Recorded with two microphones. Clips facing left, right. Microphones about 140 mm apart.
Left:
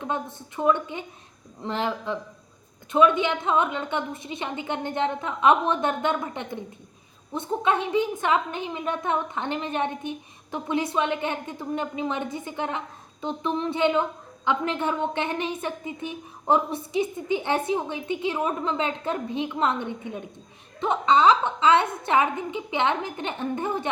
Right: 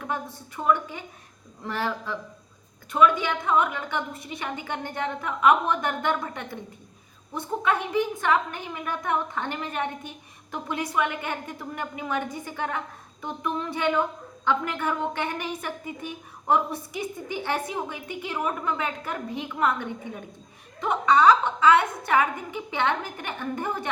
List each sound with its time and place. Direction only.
0.0 s a woman's voice: 20° left (ahead or behind)